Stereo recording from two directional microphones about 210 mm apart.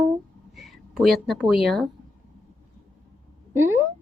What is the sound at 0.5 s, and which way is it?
Speech, centre (ahead or behind).